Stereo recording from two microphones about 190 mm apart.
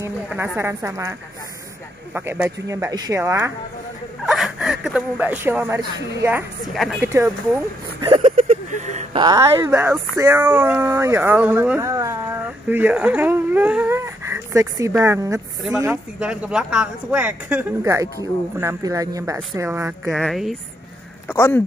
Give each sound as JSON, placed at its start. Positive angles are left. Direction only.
{"t": 0.0, "sound": "a woman's voice", "side_deg": -10}
{"t": 2.1, "sound": "a woman's voice", "side_deg": -10}
{"t": 4.3, "sound": "speech", "side_deg": -5}
{"t": 6.7, "sound": "a woman's voice", "side_deg": 0}
{"t": 8.0, "sound": "speech", "side_deg": -25}
{"t": 8.3, "sound": "a sound", "side_deg": -35}
{"t": 9.7, "sound": "a woman's voice", "side_deg": -15}
{"t": 16.2, "sound": "a woman's voice", "side_deg": -5}
{"t": 20.2, "sound": "a woman's voice", "side_deg": 0}
{"t": 21.3, "sound": "speech", "side_deg": 10}